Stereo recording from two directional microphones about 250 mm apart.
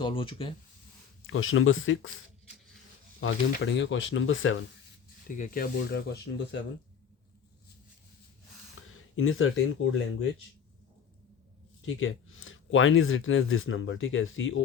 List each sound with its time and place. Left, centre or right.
0.0 s speech: left
1.3 s speech: left
5.3 s speech: left
8.9 s speech: left
11.9 s speech: left